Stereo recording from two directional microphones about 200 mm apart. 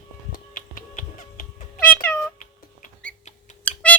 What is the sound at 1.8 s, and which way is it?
Cat, 5° left (ahead or behind).